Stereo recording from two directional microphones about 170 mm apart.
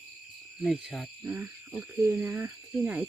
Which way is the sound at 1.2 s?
10° right (ahead or behind).